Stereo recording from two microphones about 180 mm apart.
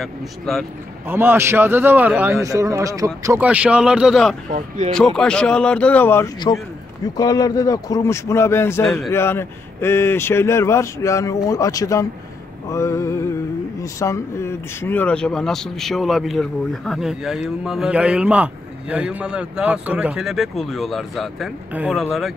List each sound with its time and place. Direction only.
0.0 s speech: centre (ahead or behind)
1.0 s a man's voice: 10° right (ahead or behind)
3.4 s speech: 5° right (ahead or behind)
4.5 s speech: 40° right (ahead or behind)
4.9 s speech: 5° left (ahead or behind)